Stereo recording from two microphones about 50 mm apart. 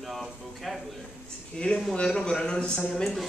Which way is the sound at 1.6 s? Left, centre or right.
Left.